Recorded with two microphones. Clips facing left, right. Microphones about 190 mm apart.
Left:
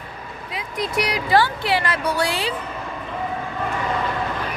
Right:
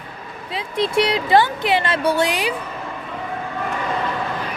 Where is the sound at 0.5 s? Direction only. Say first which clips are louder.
Right 5 dB; 30° right (ahead or behind).